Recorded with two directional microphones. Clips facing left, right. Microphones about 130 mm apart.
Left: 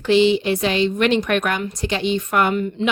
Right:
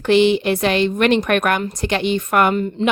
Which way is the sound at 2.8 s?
35° right (ahead or behind).